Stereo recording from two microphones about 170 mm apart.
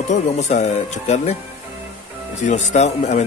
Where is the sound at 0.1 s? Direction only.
45° left (ahead or behind).